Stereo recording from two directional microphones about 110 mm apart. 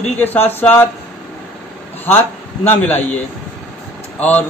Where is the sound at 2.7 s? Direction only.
15° left (ahead or behind).